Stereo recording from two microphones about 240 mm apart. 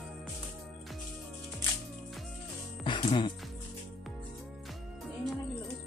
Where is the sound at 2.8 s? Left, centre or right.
Left.